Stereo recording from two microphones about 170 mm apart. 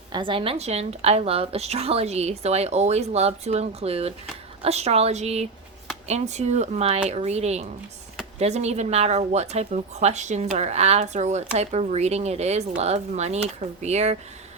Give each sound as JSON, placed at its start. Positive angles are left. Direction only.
{"t": 0.1, "sound": "speech", "side_deg": -30}